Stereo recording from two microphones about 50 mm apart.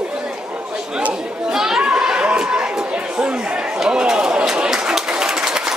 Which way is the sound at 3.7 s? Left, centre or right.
Centre.